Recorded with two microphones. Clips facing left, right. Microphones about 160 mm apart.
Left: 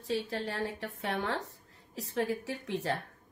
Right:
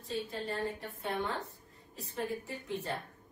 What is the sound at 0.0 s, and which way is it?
A woman's voice, 90° left.